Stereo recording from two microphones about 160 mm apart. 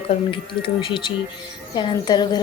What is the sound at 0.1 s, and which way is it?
A woman's voice, 30° left (ahead or behind).